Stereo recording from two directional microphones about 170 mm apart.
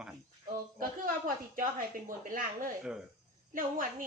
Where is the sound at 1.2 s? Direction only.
55° right (ahead or behind).